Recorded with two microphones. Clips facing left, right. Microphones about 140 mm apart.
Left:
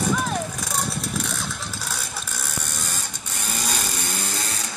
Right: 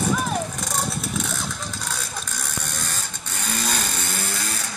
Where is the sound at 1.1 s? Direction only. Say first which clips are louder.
Right 1 dB; centre (ahead or behind).